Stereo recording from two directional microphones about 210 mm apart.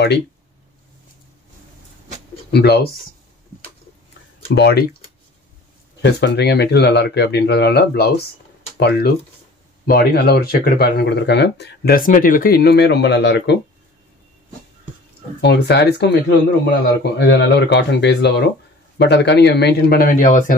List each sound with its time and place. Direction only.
2.5 s speech: 50° left (ahead or behind)
4.6 s speech: 50° left (ahead or behind)
6.0 s speech: 55° left (ahead or behind)
15.4 s speech: 50° left (ahead or behind)